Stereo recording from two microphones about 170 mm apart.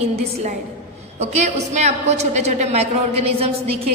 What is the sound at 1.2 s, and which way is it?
A woman's voice, 40° right (ahead or behind).